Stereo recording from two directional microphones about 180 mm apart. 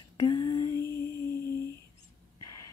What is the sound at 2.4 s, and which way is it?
Whispering, 20° left (ahead or behind).